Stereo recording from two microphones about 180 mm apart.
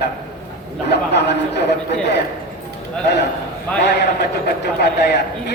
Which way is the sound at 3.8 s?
65° left (ahead or behind).